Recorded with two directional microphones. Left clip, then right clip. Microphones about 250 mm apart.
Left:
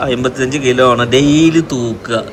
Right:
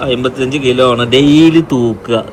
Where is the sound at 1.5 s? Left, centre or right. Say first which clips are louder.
Right 3 dB; centre.